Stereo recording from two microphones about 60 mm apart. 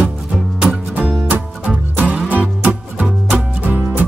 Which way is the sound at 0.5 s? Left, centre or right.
Centre.